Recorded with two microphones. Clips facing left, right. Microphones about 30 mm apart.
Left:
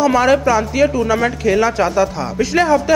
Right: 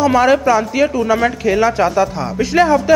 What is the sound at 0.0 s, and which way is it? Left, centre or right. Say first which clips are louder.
Speech: right 1 dB; centre.